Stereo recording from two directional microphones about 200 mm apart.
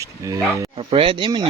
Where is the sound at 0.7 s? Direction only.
25° right (ahead or behind).